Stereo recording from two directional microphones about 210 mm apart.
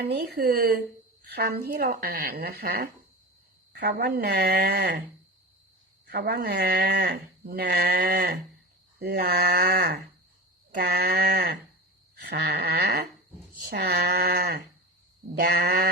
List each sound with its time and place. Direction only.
0.0 s speech: 50° right (ahead or behind)
6.1 s speech: 50° right (ahead or behind)
10.8 s speech: 50° right (ahead or behind)